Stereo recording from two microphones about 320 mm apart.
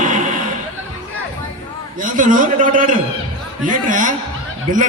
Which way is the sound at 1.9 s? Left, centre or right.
Right.